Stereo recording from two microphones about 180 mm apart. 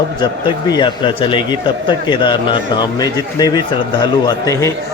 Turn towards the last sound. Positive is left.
turn(degrees=20)  # may be behind; listen again after turning